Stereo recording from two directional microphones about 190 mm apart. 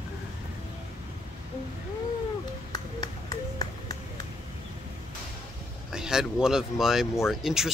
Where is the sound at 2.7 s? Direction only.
20° left (ahead or behind).